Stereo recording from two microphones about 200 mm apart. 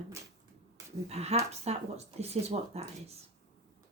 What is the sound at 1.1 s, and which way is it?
Speech, 30° right (ahead or behind).